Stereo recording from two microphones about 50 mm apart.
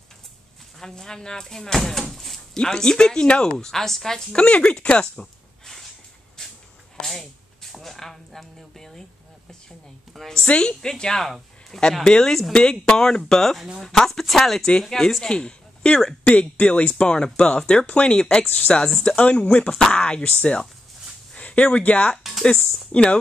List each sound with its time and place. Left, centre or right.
0.7 s speech: centre
5.2 s a sound: centre
10.1 s speech: centre
10.5 s speech: centre
18.9 s speech: centre
19.1 s speech: left